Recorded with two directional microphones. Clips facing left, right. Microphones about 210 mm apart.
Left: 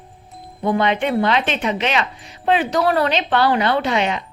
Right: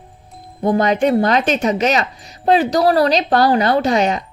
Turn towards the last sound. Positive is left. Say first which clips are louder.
# right 4 dB
turn(degrees=-40)  # may be behind; listen again after turning